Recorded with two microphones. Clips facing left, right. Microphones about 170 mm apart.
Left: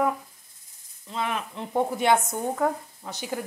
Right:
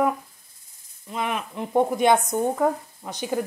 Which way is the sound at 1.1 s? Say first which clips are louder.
Right 2 dB; 15° right (ahead or behind).